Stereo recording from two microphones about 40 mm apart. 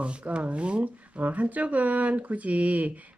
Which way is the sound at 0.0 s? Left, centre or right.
Right.